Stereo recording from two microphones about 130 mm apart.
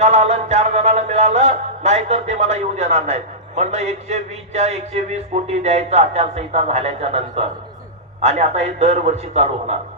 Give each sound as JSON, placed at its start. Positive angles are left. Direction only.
{"t": 0.0, "sound": "music", "side_deg": -55}